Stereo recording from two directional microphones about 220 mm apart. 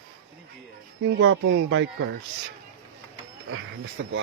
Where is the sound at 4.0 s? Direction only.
60° right (ahead or behind).